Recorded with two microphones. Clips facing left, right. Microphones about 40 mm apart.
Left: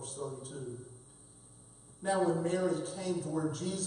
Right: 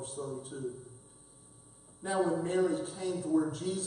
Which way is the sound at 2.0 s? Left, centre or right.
Centre.